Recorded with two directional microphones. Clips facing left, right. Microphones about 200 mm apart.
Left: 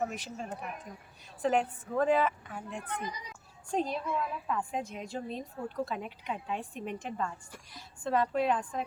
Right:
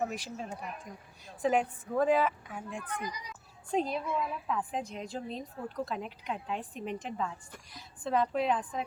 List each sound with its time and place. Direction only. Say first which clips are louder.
0.0 s a woman's voice: even; centre (ahead or behind)
1.6 s a woman's voice: right 1 dB; 15° right (ahead or behind); by 8.8 s centre (ahead or behind)